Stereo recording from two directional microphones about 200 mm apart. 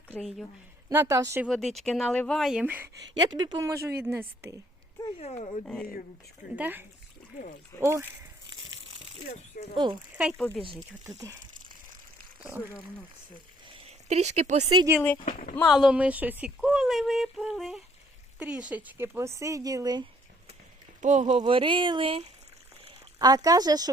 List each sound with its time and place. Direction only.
0.2 s speech: centre (ahead or behind)
0.9 s speech: 15° right (ahead or behind)
1.5 s speech: centre (ahead or behind)
5.2 s speech: 35° left (ahead or behind)
5.6 s speech: 5° left (ahead or behind)
6.6 s speech: 10° right (ahead or behind)
9.7 s speech: 20° right (ahead or behind)
10.1 s speech: 5° right (ahead or behind)
13.8 s speech: 35° right (ahead or behind)
15.2 s speech: 35° left (ahead or behind)
15.5 s speech: centre (ahead or behind); by 20.1 s 20° right (ahead or behind)
21.0 s speech: 35° right (ahead or behind); by 23.9 s 20° right (ahead or behind)